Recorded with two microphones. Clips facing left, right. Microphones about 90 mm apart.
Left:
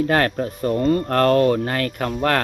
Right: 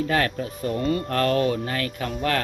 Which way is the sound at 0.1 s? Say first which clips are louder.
Left 4 dB; 45° left (ahead or behind).